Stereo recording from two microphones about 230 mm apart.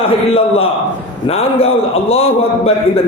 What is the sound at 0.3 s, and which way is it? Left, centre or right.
A man's voice, left.